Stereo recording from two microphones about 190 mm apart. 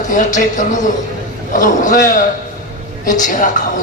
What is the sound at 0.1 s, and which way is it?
A man's voice, 40° left (ahead or behind).